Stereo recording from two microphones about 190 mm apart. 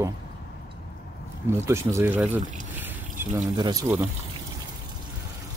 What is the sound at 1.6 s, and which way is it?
Speech, 15° right (ahead or behind).